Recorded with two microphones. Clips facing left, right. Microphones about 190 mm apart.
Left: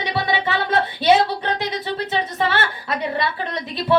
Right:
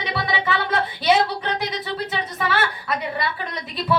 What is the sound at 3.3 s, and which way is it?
Speech, 25° left (ahead or behind).